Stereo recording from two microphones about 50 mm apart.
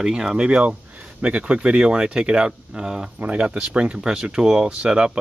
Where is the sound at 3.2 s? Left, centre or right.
Right.